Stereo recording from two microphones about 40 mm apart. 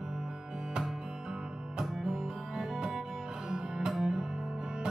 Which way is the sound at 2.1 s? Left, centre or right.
Centre.